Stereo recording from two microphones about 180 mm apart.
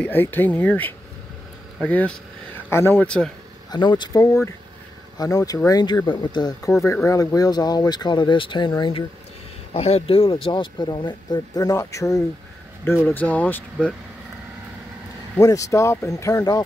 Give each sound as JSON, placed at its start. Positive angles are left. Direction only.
{"t": 0.0, "sound": "speech", "side_deg": 10}
{"t": 3.7, "sound": "speech", "side_deg": 25}
{"t": 15.3, "sound": "speech", "side_deg": 15}